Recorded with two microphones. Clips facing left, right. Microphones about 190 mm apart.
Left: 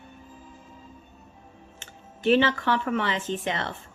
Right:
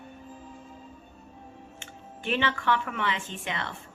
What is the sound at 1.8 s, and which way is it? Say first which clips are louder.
Speech: left 5 dB; 35° left (ahead or behind).